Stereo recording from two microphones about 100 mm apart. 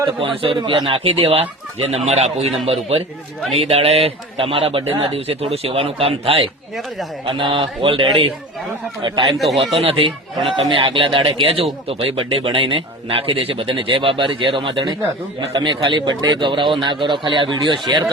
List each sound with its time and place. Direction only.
0.2 s speech: 65° right (ahead or behind)
2.0 s a man's voice: 90° right
2.6 s speech: 75° right (ahead or behind)
7.3 s speech: 60° right (ahead or behind)
9.4 s speech: centre (ahead or behind)
10.7 s a man's voice: 60° right (ahead or behind)